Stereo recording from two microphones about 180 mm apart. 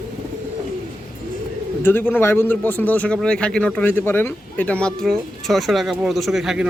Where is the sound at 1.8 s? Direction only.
10° left (ahead or behind).